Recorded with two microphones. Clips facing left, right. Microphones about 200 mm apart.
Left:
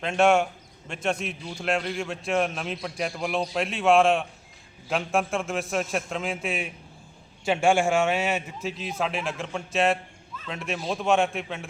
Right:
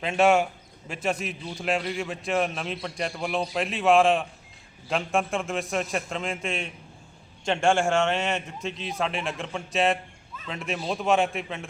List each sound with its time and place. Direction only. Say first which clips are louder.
0.0 s a man's voice: even; 5° right (ahead or behind)